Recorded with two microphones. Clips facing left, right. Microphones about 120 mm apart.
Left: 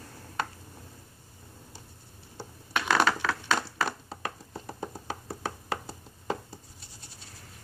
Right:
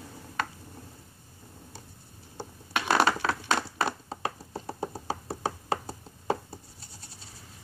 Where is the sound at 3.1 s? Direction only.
35° right (ahead or behind).